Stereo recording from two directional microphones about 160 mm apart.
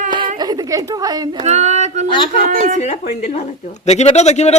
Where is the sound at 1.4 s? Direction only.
45° right (ahead or behind).